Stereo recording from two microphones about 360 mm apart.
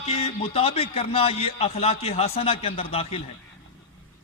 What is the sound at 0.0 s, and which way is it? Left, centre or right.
A man's voice, centre.